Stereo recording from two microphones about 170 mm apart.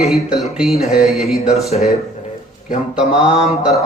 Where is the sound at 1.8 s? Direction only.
40° left (ahead or behind).